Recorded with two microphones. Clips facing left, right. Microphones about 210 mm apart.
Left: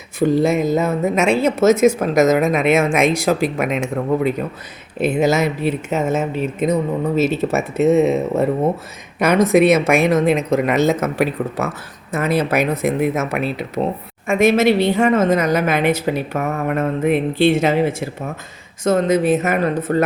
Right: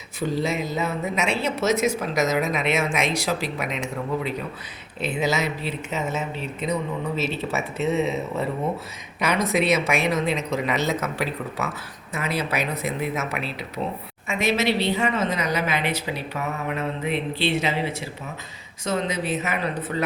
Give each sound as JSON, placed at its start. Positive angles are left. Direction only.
{"t": 0.2, "sound": "a woman's voice", "side_deg": 50}